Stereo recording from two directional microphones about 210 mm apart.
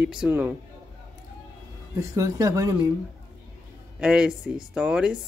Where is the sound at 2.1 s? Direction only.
15° right (ahead or behind).